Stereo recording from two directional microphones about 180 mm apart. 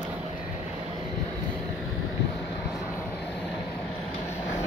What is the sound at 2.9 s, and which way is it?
Vehicle, 5° left (ahead or behind).